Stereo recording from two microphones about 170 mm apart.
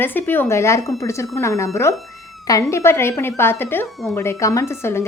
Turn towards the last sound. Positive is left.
turn(degrees=15)  # may be behind; listen again after turning